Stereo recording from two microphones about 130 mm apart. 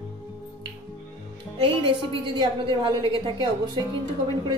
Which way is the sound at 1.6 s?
40° right (ahead or behind).